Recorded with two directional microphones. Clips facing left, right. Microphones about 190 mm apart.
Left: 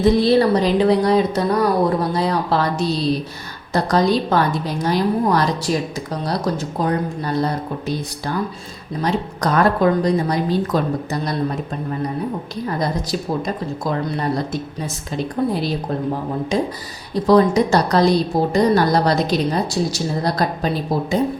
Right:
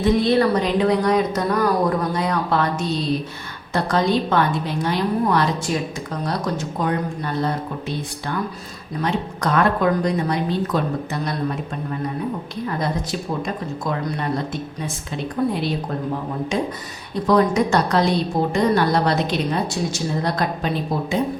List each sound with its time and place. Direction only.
0.0 s a woman's voice: 35° left (ahead or behind)
12.6 s a woman's voice: 35° left (ahead or behind)
17.2 s a woman's voice: 35° left (ahead or behind)